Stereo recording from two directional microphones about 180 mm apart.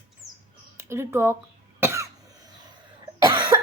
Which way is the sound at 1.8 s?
15° right (ahead or behind).